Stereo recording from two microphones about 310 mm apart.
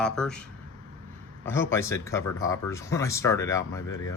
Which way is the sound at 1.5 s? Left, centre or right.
Centre.